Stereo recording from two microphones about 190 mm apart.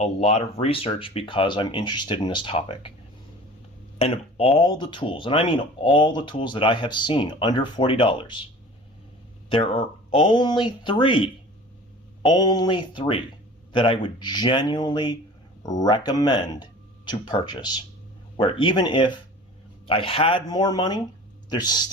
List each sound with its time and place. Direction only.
0.0 s speech: 35° left (ahead or behind)
3.9 s speech: 30° left (ahead or behind)
9.5 s speech: 30° left (ahead or behind)